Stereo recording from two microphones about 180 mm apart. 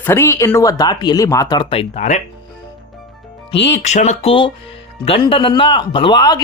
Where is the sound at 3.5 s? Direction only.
75° left (ahead or behind).